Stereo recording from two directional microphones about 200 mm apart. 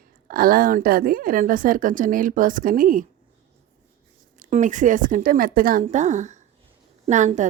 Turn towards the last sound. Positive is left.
turn(degrees=-35)  # may be behind; listen again after turning